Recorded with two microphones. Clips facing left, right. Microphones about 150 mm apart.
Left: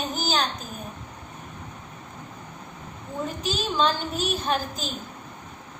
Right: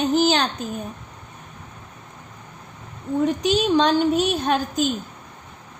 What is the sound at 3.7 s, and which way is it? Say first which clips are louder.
Speech: right 5 dB; 75° right (ahead or behind).